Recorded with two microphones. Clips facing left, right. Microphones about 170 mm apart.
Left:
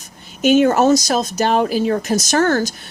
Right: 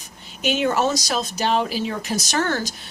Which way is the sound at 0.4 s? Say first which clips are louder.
Left 8 dB; 45° left (ahead or behind).